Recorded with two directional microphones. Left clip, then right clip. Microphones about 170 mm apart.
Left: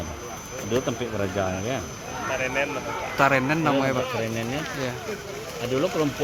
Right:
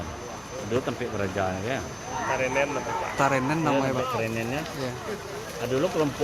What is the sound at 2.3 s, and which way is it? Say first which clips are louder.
Speech: even; 20° right (ahead or behind).